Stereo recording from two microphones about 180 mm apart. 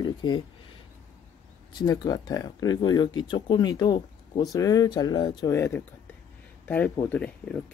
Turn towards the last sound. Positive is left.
turn(degrees=5)  # may be behind; listen again after turning